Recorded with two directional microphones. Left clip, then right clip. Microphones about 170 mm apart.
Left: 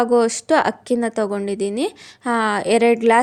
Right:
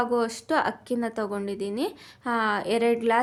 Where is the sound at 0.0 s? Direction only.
40° left (ahead or behind).